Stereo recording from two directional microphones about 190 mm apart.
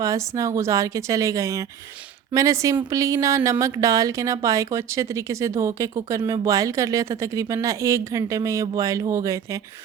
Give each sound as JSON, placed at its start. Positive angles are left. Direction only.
{"t": 0.0, "sound": "speech", "side_deg": -15}